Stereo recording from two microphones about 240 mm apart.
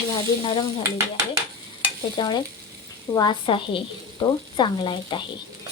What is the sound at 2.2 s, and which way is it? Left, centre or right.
Frying, centre.